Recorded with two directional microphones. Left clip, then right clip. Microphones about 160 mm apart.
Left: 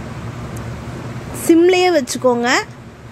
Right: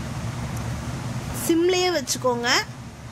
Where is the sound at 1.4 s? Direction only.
20° left (ahead or behind).